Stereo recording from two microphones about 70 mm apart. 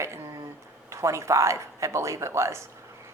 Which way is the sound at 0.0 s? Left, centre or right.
Right.